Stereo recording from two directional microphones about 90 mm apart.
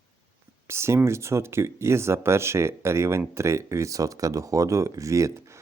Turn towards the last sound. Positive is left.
turn(degrees=-35)  # may be behind; listen again after turning